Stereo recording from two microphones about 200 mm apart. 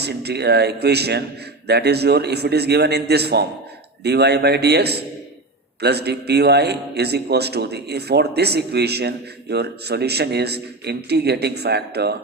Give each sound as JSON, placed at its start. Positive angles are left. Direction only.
{"t": 0.0, "sound": "a man's voice", "side_deg": -55}